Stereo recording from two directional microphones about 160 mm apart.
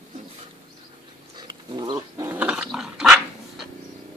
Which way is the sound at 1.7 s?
30° right (ahead or behind).